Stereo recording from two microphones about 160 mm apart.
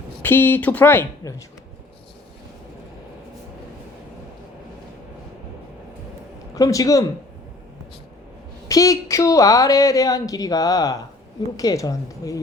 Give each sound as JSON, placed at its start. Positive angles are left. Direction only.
{"t": 0.2, "sound": "speech", "side_deg": 10}
{"t": 6.5, "sound": "a man's voice", "side_deg": 20}
{"t": 8.6, "sound": "a woman's voice", "side_deg": 20}